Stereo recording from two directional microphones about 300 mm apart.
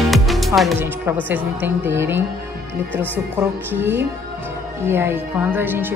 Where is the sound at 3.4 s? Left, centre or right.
Centre.